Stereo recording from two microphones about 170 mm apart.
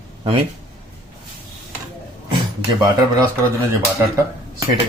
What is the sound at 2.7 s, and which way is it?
Speech, 20° right (ahead or behind).